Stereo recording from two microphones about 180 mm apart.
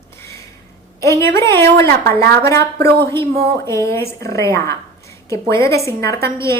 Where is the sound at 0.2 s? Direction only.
15° left (ahead or behind).